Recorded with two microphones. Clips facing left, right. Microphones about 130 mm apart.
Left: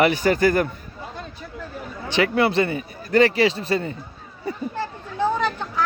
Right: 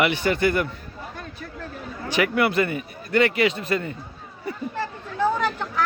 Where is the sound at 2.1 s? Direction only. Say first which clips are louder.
Left 2 dB; 30° left (ahead or behind).